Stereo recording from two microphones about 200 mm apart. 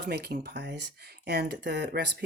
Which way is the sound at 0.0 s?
55° right (ahead or behind).